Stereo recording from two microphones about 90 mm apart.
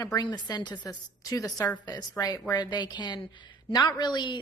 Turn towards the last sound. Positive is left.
turn(degrees=55)  # may be behind; listen again after turning